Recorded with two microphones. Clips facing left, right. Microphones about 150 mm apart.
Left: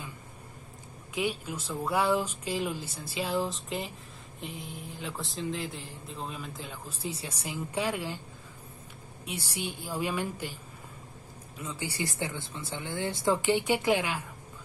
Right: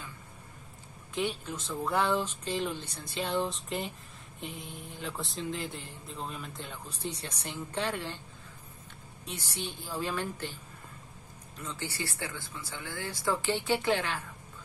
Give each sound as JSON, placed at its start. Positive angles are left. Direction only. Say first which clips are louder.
{"t": 1.1, "sound": "speech", "louder": "left 1 dB", "side_deg": 10}
{"t": 9.2, "sound": "speech", "louder": "left 3 dB", "side_deg": 10}
{"t": 11.5, "sound": "speech", "louder": "left 2 dB", "side_deg": 10}